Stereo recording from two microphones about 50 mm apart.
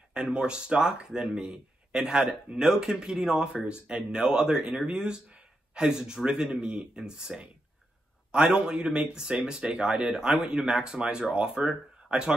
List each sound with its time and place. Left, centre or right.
0.1 s speech: centre
4.6 s speech: right